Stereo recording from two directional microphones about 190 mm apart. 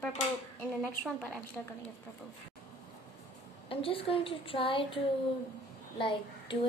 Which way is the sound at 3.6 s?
30° left (ahead or behind).